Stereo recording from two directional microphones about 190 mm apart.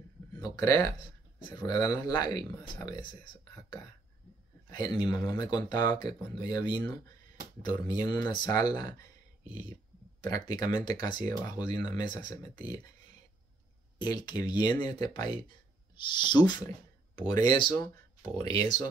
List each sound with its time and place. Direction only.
0.4 s speech: 15° left (ahead or behind)
4.6 s speech: 20° left (ahead or behind)
14.0 s speech: 20° left (ahead or behind)